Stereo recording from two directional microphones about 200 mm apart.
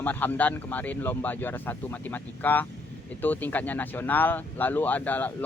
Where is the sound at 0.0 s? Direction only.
10° left (ahead or behind).